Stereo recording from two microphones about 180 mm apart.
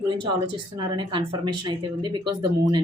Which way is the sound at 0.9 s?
25° right (ahead or behind).